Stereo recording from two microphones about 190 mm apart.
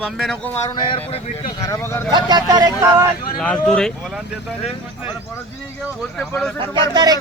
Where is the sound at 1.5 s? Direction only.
15° left (ahead or behind).